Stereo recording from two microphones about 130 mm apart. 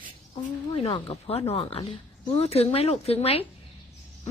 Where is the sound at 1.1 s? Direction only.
50° left (ahead or behind).